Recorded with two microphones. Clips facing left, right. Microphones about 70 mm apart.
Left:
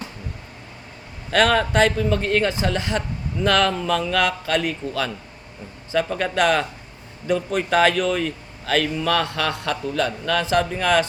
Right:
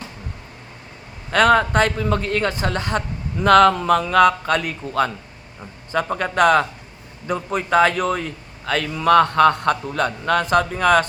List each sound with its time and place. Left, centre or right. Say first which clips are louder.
1.3 s speech: right 3 dB; right